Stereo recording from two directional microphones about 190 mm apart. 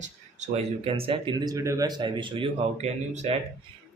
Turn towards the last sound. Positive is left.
turn(degrees=-35)  # may be behind; listen again after turning